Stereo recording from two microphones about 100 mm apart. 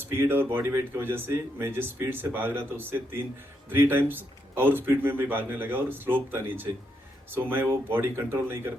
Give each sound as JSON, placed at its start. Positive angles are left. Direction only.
{"t": 0.1, "sound": "speech", "side_deg": -20}